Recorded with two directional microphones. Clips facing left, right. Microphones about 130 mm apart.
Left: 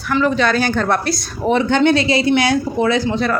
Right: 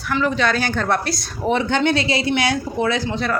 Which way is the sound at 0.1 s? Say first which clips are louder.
Left 4 dB; 40° left (ahead or behind).